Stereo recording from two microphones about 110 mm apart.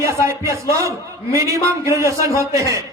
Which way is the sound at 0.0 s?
25° right (ahead or behind).